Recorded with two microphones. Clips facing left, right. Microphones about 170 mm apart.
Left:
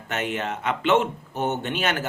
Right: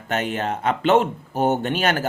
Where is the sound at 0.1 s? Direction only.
35° right (ahead or behind).